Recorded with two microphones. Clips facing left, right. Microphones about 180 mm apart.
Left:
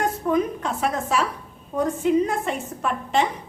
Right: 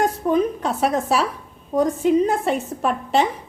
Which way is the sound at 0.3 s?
35° right (ahead or behind).